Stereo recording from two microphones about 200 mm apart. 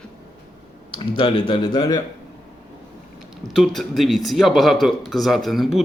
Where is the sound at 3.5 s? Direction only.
Centre (ahead or behind).